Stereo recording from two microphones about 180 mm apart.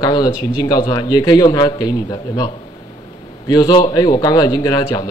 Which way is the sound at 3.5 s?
25° left (ahead or behind).